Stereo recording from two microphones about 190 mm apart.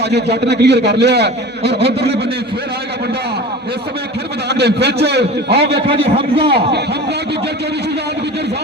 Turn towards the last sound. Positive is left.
turn(degrees=-60)  # may be behind; listen again after turning